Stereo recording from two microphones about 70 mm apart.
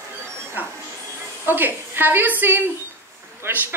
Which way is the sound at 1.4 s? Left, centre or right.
Right.